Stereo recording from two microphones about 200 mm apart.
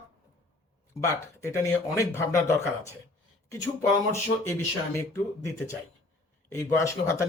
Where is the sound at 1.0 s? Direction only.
15° left (ahead or behind).